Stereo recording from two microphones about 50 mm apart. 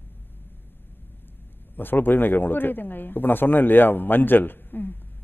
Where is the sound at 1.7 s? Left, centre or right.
Left.